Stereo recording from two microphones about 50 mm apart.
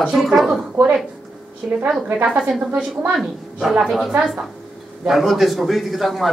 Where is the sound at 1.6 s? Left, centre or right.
Right.